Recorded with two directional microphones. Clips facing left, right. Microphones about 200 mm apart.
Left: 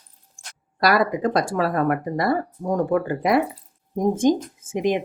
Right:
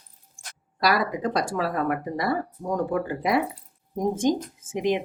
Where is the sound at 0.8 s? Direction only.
50° left (ahead or behind).